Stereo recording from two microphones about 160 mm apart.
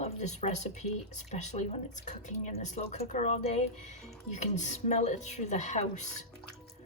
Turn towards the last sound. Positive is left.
turn(degrees=45)  # may be behind; listen again after turning